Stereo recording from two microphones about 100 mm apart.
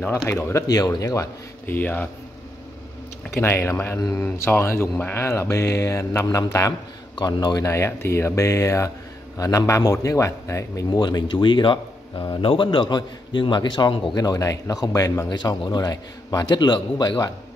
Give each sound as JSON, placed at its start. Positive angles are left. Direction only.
{"t": 0.3, "sound": "speech", "side_deg": 25}
{"t": 0.7, "sound": "speech", "side_deg": 40}
{"t": 1.7, "sound": "speech", "side_deg": 20}
{"t": 3.3, "sound": "speech", "side_deg": 25}
{"t": 7.2, "sound": "a man's voice", "side_deg": 45}
{"t": 7.6, "sound": "speech", "side_deg": 25}
{"t": 10.9, "sound": "a man's voice", "side_deg": 45}
{"t": 14.1, "sound": "speech", "side_deg": 40}